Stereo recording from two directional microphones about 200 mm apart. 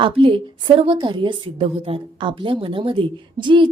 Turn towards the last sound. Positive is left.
turn(degrees=-25)  # may be behind; listen again after turning